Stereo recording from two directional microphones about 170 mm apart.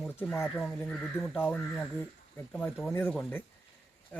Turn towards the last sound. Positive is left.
turn(degrees=10)  # may be behind; listen again after turning